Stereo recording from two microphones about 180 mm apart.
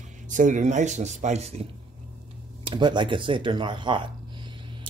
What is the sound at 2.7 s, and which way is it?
Speech, 25° right (ahead or behind).